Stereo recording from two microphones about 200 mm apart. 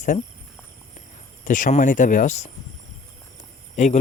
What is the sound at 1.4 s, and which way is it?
Speech, 40° left (ahead or behind).